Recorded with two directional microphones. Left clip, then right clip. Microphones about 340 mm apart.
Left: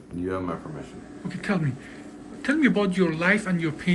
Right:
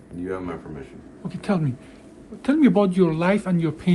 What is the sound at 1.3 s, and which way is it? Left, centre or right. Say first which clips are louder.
Speech: right 2 dB; centre.